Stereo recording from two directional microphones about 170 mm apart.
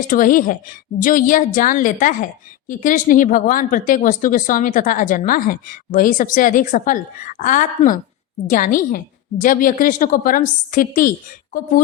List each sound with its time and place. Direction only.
0.1 s a woman's voice: 50° left (ahead or behind)